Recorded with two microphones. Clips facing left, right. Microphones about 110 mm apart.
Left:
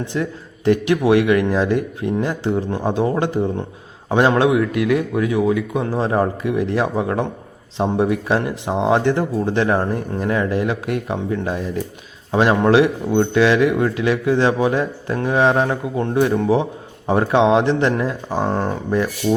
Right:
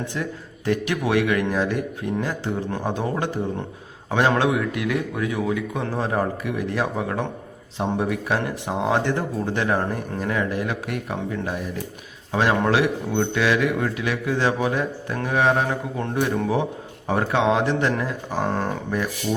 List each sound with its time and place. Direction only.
0.1 s speech: 25° left (ahead or behind)